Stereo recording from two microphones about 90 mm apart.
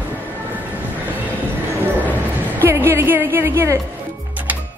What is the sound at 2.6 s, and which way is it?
Speech, 25° right (ahead or behind).